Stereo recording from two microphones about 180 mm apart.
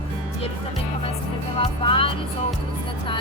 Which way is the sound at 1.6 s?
30° left (ahead or behind).